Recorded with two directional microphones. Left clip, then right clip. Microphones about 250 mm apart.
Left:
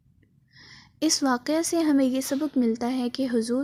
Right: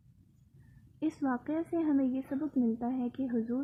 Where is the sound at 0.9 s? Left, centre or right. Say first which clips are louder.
Left 10 dB; left.